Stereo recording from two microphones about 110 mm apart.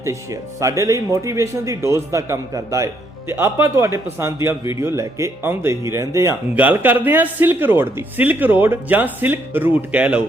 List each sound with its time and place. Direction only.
0.0 s speech: 25° right (ahead or behind); by 10.2 s 10° right (ahead or behind)